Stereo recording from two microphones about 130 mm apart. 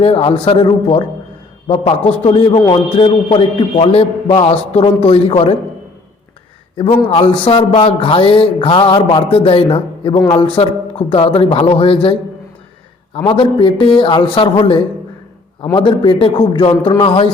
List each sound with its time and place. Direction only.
0.0 s a man's voice: 45° left (ahead or behind)
6.7 s a man's voice: 50° left (ahead or behind)
13.1 s a man's voice: 40° left (ahead or behind)
15.7 s a man's voice: 40° left (ahead or behind)